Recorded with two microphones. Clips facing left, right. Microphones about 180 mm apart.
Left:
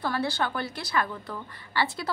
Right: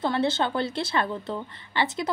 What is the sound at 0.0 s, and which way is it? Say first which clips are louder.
A woman's voice: right 4 dB; 25° right (ahead or behind).